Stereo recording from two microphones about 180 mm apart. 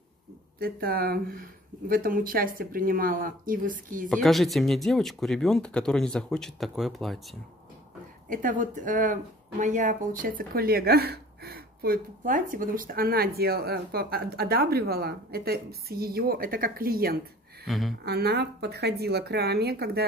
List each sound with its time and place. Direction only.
0.6 s speech: 55° right (ahead or behind)
4.1 s speech: centre (ahead or behind)
8.3 s speech: 50° right (ahead or behind)
17.6 s speech: centre (ahead or behind)
18.0 s speech: 65° right (ahead or behind)